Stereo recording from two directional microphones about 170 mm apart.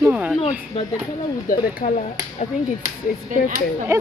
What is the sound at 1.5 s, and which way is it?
Speech, 50° left (ahead or behind).